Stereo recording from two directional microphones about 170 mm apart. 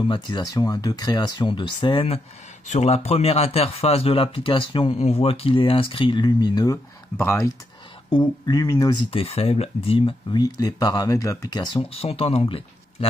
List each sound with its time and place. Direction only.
0.0 s speech: 25° left (ahead or behind)
9.1 s speech: 35° left (ahead or behind)